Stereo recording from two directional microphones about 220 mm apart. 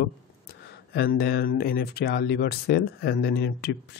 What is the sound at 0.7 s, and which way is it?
Speech, 45° left (ahead or behind).